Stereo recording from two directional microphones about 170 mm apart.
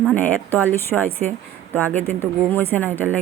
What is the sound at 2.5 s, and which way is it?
Speech, 10° left (ahead or behind).